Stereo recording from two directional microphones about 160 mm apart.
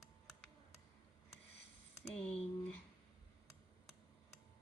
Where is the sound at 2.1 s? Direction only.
5° left (ahead or behind).